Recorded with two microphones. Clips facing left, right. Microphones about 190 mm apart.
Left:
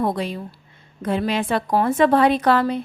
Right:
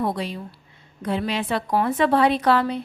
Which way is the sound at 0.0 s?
50° left (ahead or behind).